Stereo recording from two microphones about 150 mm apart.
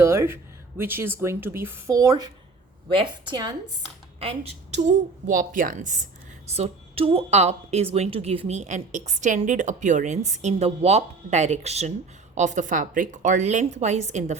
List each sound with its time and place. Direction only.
0.0 s a woman's voice: 15° right (ahead or behind)
4.2 s a woman's voice: 40° right (ahead or behind)
4.8 s a woman's voice: 55° right (ahead or behind)
6.5 s a woman's voice: 40° right (ahead or behind)